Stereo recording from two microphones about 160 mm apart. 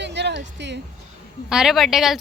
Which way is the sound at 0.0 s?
90° right.